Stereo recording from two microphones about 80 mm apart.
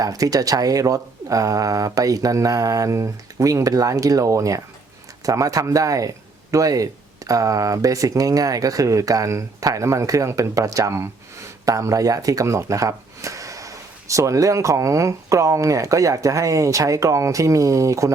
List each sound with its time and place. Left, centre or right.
0.0 s speech: right